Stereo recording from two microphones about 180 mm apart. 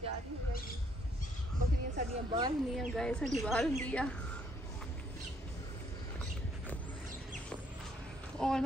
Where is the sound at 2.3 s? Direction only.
25° right (ahead or behind).